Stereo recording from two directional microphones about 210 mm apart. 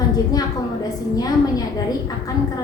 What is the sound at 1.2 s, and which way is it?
Speech, 20° left (ahead or behind).